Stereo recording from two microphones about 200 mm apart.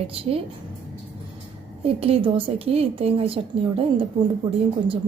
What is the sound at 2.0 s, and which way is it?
A woman's voice, 25° right (ahead or behind).